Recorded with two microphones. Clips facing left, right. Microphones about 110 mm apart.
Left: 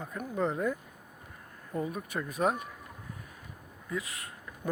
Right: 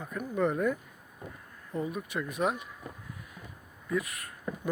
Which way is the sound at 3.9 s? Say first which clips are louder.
Right 4 dB; 25° left (ahead or behind).